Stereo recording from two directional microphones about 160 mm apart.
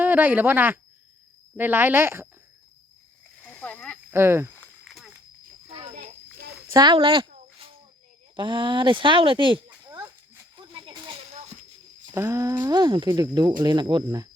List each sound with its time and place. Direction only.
0.0 s speech: 10° right (ahead or behind)
3.4 s a sound: 5° left (ahead or behind)
4.1 s speech: 15° right (ahead or behind)
4.6 s snake: centre (ahead or behind)
6.7 s speech: 25° right (ahead or behind)
8.4 s speech: 30° right (ahead or behind)
10.6 s a sound: 30° right (ahead or behind)
12.1 s speech: 20° right (ahead or behind)